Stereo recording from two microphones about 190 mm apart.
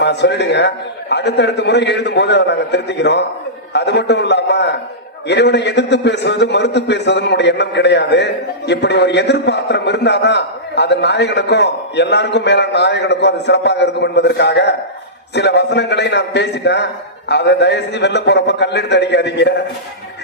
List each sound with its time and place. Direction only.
0.0 s a man's voice: 65° left (ahead or behind)